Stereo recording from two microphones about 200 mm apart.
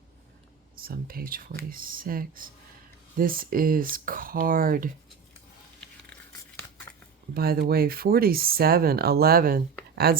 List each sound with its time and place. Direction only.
0.8 s speech: 45° right (ahead or behind)
7.3 s speech: 50° right (ahead or behind)